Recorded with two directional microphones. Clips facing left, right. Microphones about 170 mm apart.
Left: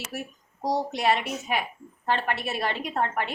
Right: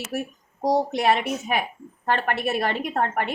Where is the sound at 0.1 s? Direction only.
55° right (ahead or behind).